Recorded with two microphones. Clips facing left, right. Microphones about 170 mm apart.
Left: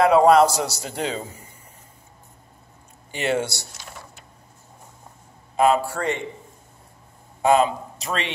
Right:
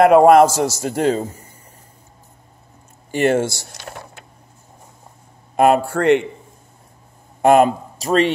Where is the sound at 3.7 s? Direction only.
65° right (ahead or behind).